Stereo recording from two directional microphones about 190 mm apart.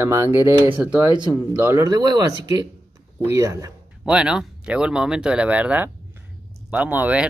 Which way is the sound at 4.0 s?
5° right (ahead or behind).